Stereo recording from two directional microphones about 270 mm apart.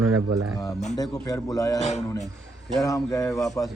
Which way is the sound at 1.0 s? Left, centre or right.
Centre.